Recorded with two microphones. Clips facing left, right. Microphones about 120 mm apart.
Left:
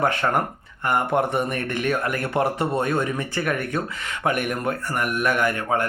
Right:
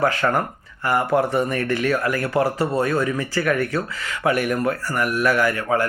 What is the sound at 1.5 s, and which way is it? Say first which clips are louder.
Speech: right 3 dB; 20° left (ahead or behind).